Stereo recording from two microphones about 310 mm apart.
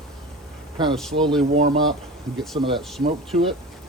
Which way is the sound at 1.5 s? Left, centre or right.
Centre.